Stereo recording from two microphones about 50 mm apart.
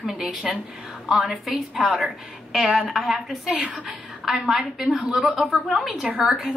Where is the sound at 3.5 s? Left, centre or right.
Right.